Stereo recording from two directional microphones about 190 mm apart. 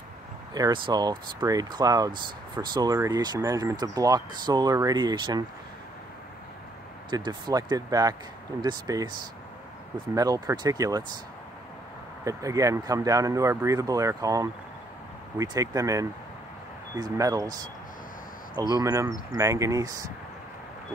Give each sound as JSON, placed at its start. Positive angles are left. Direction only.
{"t": 0.6, "sound": "speech", "side_deg": -20}
{"t": 7.1, "sound": "speech", "side_deg": -25}
{"t": 10.1, "sound": "speech", "side_deg": -20}
{"t": 12.3, "sound": "speech", "side_deg": -15}